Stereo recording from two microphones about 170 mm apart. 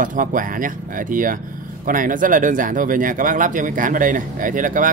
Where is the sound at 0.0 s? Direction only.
50° right (ahead or behind).